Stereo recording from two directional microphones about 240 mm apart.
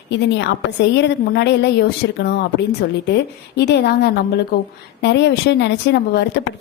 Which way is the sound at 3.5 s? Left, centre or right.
Left.